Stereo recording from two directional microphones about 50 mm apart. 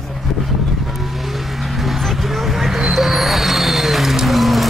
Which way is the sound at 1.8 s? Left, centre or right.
Centre.